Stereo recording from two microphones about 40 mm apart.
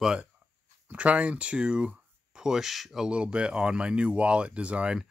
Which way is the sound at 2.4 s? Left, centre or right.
Centre.